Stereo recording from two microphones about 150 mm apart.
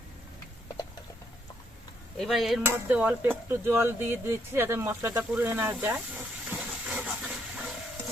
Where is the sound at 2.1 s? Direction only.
Centre (ahead or behind).